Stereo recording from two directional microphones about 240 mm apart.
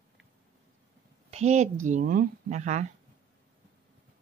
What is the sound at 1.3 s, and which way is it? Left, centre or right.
A woman's voice, right.